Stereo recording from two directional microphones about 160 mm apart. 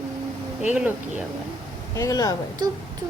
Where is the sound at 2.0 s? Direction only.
20° left (ahead or behind).